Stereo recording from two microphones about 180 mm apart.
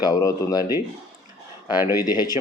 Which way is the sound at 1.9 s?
20° left (ahead or behind).